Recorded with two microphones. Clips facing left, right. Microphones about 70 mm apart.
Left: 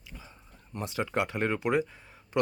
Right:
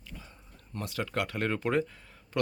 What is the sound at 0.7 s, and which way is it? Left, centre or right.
Speech, left.